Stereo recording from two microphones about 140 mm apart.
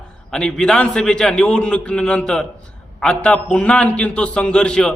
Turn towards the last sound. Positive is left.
turn(degrees=5)  # may be behind; listen again after turning